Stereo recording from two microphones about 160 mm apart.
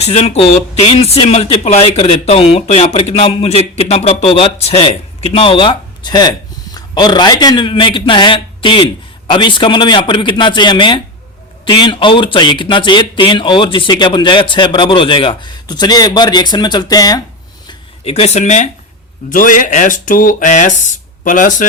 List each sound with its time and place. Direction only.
0.0 s a man's voice: 40° left (ahead or behind); by 17.2 s 25° left (ahead or behind)
17.7 s speech: 40° left (ahead or behind)
19.3 s speech: 55° left (ahead or behind)